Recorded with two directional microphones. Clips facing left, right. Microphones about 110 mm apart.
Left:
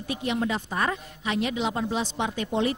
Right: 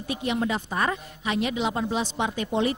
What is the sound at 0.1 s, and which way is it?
A woman's voice, 20° right (ahead or behind).